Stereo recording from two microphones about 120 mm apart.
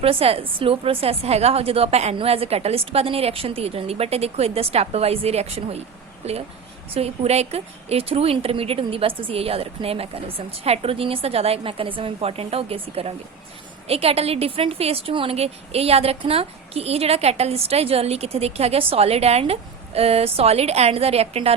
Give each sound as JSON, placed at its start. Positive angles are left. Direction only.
{"t": 0.0, "sound": "a woman's voice", "side_deg": -50}